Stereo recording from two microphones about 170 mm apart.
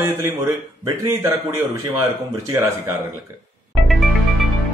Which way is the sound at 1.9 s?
20° right (ahead or behind).